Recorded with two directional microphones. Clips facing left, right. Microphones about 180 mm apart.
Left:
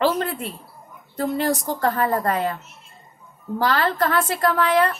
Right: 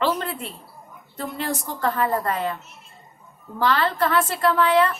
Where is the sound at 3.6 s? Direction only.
40° left (ahead or behind).